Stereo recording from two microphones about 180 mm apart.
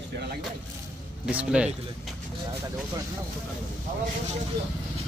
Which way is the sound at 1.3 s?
5° right (ahead or behind).